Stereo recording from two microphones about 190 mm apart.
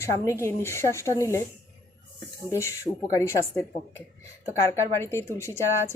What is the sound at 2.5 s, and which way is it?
A woman's voice, 15° left (ahead or behind).